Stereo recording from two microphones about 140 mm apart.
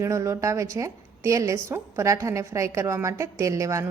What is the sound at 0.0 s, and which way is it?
A woman's voice, 20° right (ahead or behind).